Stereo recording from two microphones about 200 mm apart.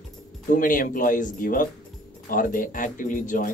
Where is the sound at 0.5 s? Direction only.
45° left (ahead or behind).